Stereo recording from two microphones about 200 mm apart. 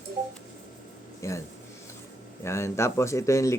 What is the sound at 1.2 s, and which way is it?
Speech, 15° left (ahead or behind).